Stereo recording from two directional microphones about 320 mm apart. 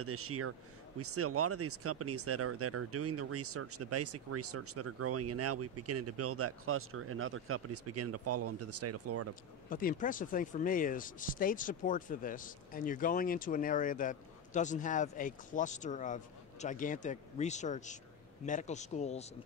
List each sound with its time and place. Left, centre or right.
0.0 s speech: right
9.3 s speech: left